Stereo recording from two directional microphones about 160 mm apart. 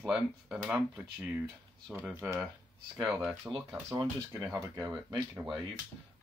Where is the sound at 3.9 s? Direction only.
25° right (ahead or behind).